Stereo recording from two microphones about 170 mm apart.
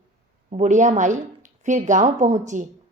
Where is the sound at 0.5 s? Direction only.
45° right (ahead or behind).